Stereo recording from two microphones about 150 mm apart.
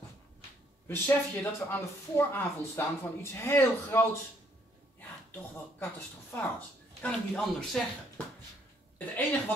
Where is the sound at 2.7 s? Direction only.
15° left (ahead or behind).